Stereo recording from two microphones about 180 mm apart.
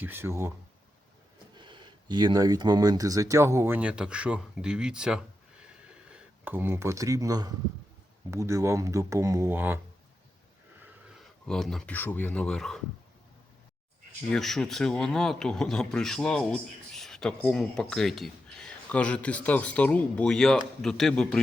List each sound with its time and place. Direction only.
0.0 s speech: 10° right (ahead or behind)
1.5 s speech: 25° right (ahead or behind); by 9.8 s 10° right (ahead or behind)
11.4 s speech: centre (ahead or behind)
14.3 s speech: centre (ahead or behind)